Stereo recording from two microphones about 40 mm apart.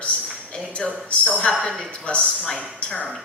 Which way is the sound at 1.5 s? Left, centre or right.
Centre.